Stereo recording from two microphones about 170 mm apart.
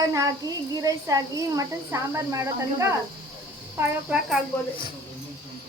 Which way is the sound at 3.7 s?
5° right (ahead or behind).